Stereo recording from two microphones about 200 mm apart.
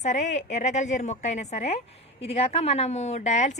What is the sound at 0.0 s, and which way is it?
A woman's voice, 35° left (ahead or behind).